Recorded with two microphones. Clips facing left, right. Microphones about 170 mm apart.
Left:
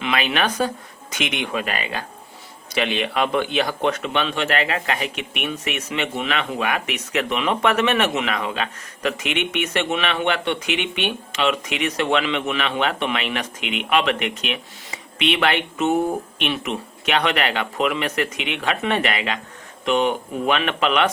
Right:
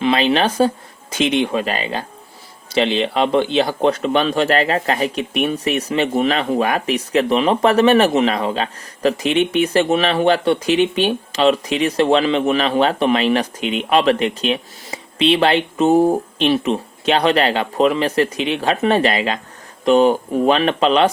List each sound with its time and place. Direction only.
0.0 s a man's voice: 30° right (ahead or behind)